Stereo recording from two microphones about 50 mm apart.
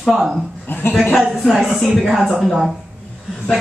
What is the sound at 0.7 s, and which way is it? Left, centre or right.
Speech, left.